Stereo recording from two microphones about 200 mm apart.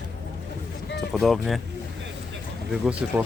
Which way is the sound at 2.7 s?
5° right (ahead or behind).